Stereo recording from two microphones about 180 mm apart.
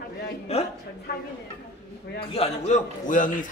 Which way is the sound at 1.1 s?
65° left (ahead or behind).